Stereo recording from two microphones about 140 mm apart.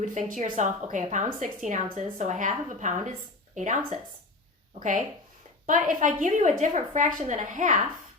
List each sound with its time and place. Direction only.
0.0 s a woman's voice: 65° right (ahead or behind)